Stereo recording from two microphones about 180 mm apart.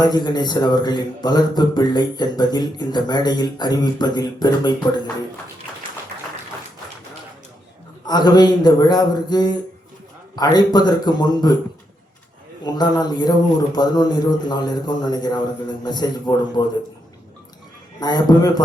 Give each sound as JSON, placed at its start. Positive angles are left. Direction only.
{"t": 0.0, "sound": "speech", "side_deg": 25}
{"t": 8.0, "sound": "speech", "side_deg": 25}
{"t": 12.6, "sound": "speech", "side_deg": 25}
{"t": 18.0, "sound": "speech", "side_deg": 25}